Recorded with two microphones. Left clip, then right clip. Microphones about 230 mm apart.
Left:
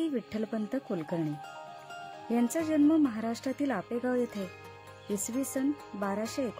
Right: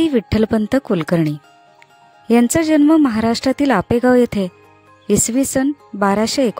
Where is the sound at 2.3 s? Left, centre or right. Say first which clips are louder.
Right 15 dB; right.